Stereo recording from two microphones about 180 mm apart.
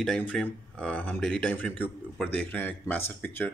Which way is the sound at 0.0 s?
5° left (ahead or behind).